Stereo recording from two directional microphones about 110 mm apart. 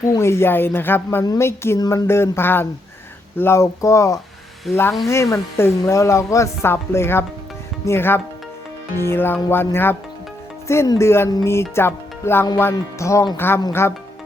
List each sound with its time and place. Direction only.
0.0 s speech: 25° left (ahead or behind)
1.8 s speech: 35° left (ahead or behind)
2.0 s speech: 25° left (ahead or behind)
10.9 s speech: 25° left (ahead or behind)